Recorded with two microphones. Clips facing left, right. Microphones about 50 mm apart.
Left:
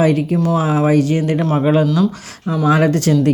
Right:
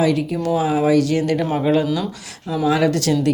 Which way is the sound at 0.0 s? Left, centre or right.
Left.